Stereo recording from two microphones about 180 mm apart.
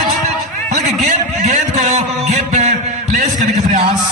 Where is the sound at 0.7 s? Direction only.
40° right (ahead or behind).